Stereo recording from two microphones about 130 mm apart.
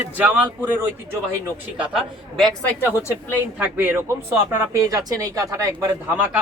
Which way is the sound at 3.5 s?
15° right (ahead or behind).